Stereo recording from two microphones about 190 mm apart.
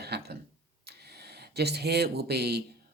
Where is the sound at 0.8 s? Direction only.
55° right (ahead or behind).